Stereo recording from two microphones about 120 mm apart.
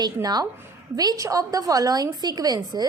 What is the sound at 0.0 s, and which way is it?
A woman's voice, 35° right (ahead or behind).